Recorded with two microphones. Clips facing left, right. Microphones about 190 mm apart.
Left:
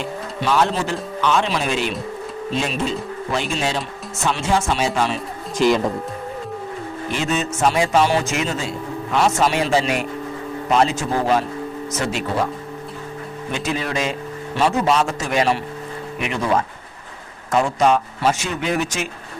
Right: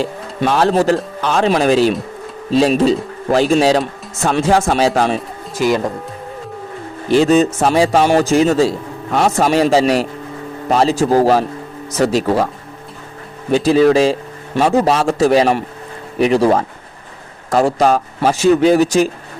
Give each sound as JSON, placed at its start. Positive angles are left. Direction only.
{"t": 0.4, "sound": "speech", "side_deg": -45}
{"t": 5.5, "sound": "speech", "side_deg": 0}
{"t": 7.1, "sound": "speech", "side_deg": -35}
{"t": 7.9, "sound": "a man's voice", "side_deg": -50}
{"t": 8.2, "sound": "speech", "side_deg": -35}
{"t": 13.5, "sound": "speech", "side_deg": -35}
{"t": 14.5, "sound": "speech", "side_deg": -50}